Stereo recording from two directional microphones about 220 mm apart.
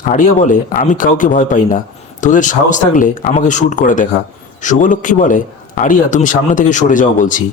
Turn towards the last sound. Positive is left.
turn(degrees=35)  # may be behind; listen again after turning